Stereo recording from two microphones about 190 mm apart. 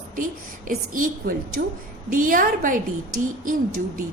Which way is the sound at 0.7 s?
50° right (ahead or behind).